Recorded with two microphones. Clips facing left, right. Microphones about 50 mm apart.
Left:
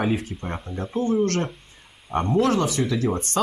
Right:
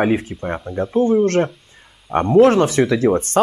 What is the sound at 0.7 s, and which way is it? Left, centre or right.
Speech, right.